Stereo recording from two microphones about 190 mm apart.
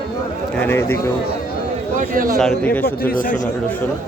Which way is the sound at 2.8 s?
50° left (ahead or behind).